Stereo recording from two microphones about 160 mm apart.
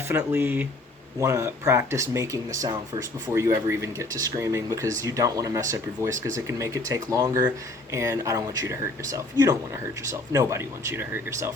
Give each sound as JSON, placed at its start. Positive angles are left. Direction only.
{"t": 0.1, "sound": "speech", "side_deg": -20}